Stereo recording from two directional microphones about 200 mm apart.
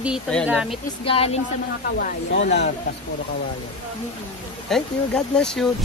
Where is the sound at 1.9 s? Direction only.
50° left (ahead or behind).